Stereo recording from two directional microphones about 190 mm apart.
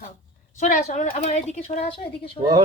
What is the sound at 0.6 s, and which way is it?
A woman's voice, 40° left (ahead or behind).